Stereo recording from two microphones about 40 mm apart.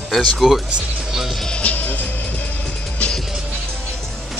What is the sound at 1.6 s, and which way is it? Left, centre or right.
Music, left.